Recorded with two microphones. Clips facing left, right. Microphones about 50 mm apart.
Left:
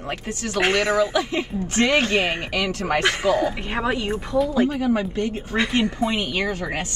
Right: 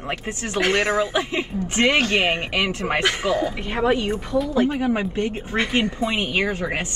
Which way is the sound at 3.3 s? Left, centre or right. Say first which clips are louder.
Left 1 dB; left.